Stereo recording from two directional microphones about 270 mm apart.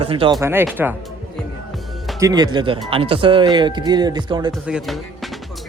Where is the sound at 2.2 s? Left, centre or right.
Centre.